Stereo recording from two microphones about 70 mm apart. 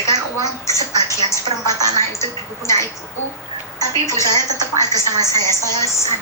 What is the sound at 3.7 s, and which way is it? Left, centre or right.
A woman's voice, left.